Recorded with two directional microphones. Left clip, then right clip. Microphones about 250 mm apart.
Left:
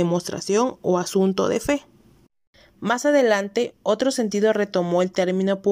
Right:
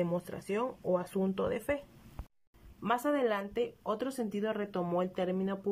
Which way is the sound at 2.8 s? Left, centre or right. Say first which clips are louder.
Left 12 dB; left.